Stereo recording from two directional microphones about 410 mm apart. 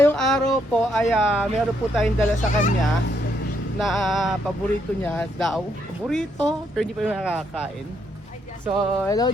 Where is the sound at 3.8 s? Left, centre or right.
Centre.